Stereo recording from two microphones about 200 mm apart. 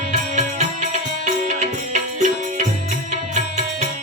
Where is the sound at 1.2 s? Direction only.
40° right (ahead or behind).